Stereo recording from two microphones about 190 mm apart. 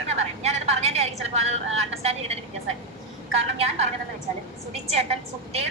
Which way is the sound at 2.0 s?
35° right (ahead or behind).